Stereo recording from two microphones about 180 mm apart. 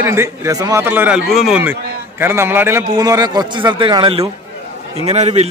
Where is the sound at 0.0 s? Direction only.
15° right (ahead or behind).